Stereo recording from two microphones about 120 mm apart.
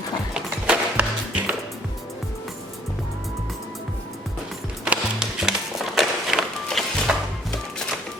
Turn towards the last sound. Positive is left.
turn(degrees=0)  # may be behind; listen again after turning